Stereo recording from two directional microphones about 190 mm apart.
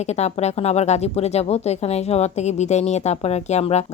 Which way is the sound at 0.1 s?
35° left (ahead or behind).